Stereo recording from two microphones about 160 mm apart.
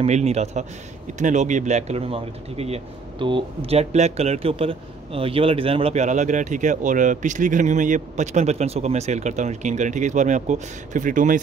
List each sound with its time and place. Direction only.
0.0 s speech: 40° right (ahead or behind)